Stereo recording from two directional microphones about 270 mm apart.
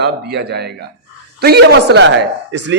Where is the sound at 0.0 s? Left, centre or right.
Right.